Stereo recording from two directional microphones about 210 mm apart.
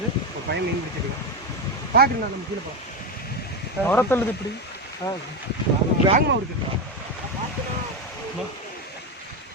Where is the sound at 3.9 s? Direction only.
10° left (ahead or behind).